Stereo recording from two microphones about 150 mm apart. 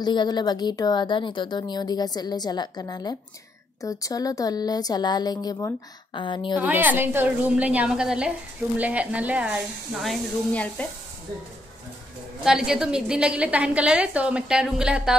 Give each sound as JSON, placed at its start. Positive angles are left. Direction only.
{"t": 0.0, "sound": "a woman's voice", "side_deg": 30}
{"t": 6.6, "sound": "a woman's voice", "side_deg": -10}
{"t": 12.4, "sound": "a woman's voice", "side_deg": -5}